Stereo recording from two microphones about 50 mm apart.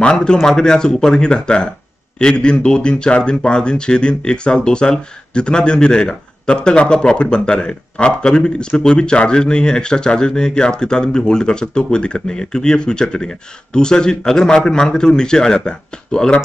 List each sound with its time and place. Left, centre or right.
0.0 s speech: centre